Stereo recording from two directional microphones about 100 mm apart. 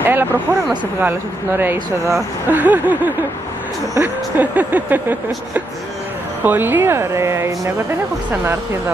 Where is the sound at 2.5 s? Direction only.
15° right (ahead or behind).